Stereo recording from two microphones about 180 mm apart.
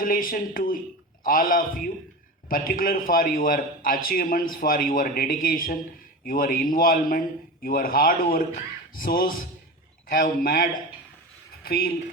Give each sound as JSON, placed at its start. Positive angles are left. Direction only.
{"t": 0.0, "sound": "a man's voice", "side_deg": 50}